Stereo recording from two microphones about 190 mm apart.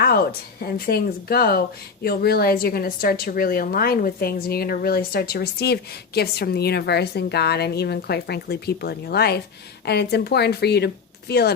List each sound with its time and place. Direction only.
0.0 s a woman's voice: 55° left (ahead or behind)